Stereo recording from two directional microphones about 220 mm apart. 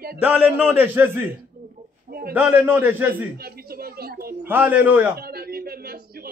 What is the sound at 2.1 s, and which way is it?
Speech, 45° right (ahead or behind).